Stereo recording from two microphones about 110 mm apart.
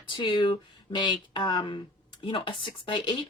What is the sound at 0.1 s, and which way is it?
A woman's voice, 45° left (ahead or behind).